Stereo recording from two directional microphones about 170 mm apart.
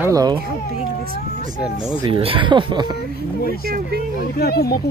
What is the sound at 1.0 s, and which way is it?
Speech, 60° right (ahead or behind).